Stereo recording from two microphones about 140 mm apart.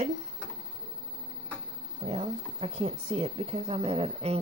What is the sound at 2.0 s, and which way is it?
Speech, 55° right (ahead or behind).